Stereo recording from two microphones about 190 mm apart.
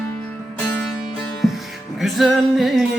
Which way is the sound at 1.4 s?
Centre (ahead or behind).